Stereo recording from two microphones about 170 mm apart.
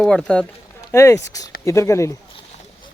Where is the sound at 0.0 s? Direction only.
5° left (ahead or behind).